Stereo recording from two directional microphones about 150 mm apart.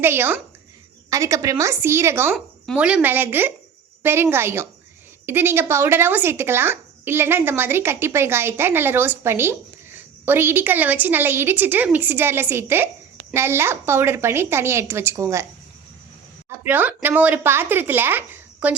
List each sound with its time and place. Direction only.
0.0 s speech: 15° right (ahead or behind)
16.5 s speech: 15° right (ahead or behind)